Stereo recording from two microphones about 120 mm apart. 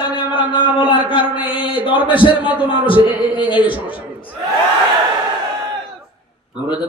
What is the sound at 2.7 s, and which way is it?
Speech, 45° left (ahead or behind).